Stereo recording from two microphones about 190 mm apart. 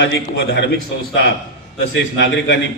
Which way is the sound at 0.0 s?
70° left (ahead or behind).